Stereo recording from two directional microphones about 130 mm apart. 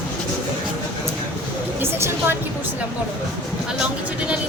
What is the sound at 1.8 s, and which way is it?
Speech, 15° right (ahead or behind).